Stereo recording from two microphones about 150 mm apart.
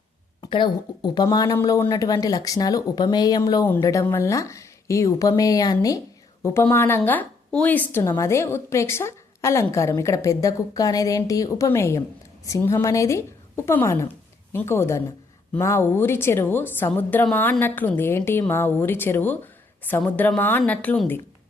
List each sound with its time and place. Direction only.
0.4 s a woman's voice: 30° left (ahead or behind); by 21.2 s 10° left (ahead or behind)